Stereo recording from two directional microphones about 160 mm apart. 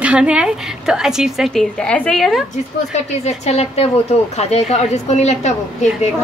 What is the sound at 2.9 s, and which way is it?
A woman's voice, 45° left (ahead or behind).